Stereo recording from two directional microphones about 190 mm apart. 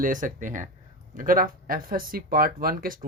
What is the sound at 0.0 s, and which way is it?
Speech, 45° right (ahead or behind).